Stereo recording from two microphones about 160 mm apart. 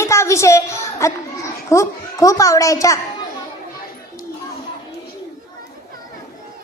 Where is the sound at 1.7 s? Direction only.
20° left (ahead or behind).